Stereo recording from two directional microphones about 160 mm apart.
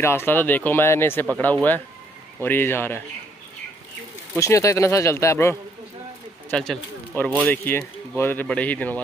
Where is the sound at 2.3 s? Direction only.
15° left (ahead or behind).